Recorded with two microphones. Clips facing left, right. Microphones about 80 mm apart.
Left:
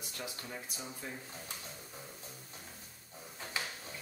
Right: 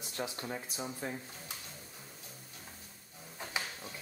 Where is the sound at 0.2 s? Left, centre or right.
Right.